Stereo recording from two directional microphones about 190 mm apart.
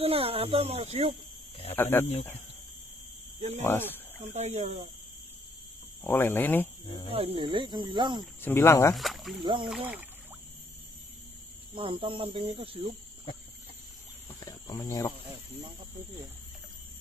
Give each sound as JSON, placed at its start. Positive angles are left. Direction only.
{"t": 0.0, "sound": "speech", "side_deg": -30}
{"t": 1.8, "sound": "speech", "side_deg": 10}
{"t": 3.3, "sound": "speech", "side_deg": -35}
{"t": 3.6, "sound": "speech", "side_deg": 10}
{"t": 4.3, "sound": "speech", "side_deg": -35}
{"t": 6.0, "sound": "speech", "side_deg": 10}
{"t": 7.1, "sound": "speech", "side_deg": -30}
{"t": 8.4, "sound": "speech", "side_deg": 10}
{"t": 8.9, "sound": "speech", "side_deg": 0}
{"t": 9.4, "sound": "speech", "side_deg": -25}
{"t": 9.7, "sound": "speech", "side_deg": -10}
{"t": 11.7, "sound": "speech", "side_deg": -30}
{"t": 14.4, "sound": "cricket", "side_deg": 20}